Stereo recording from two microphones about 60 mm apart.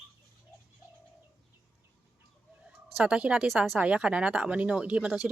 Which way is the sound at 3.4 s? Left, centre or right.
Centre.